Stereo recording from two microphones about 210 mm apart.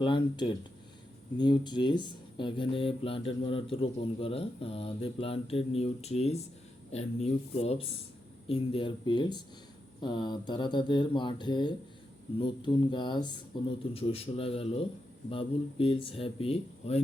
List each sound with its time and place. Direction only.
0.0 s speech: 25° left (ahead or behind)